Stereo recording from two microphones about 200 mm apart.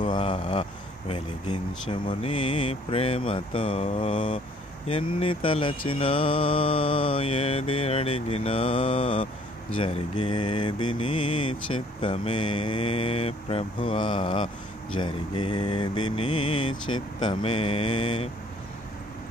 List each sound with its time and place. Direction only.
0.0 s speech: 25° left (ahead or behind)
4.8 s mantra: 25° left (ahead or behind)